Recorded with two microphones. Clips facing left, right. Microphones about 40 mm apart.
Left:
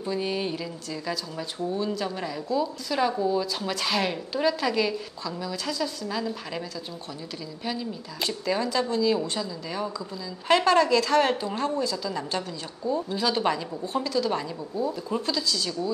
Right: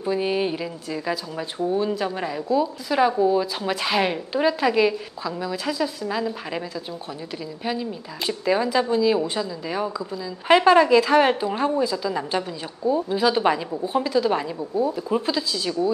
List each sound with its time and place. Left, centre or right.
0.0 s speech: centre
7.6 s speech: centre